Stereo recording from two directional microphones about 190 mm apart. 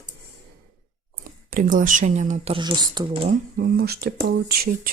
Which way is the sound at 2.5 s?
25° right (ahead or behind).